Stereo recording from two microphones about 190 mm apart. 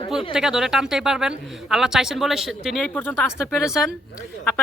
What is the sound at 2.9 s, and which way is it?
Speech, 10° left (ahead or behind).